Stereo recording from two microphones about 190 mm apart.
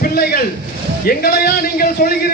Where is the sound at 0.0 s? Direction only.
55° left (ahead or behind).